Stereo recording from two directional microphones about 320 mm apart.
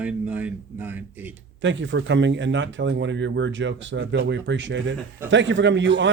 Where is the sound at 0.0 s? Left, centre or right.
Centre.